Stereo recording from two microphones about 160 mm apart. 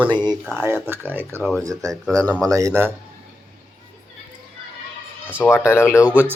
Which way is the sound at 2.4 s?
20° right (ahead or behind).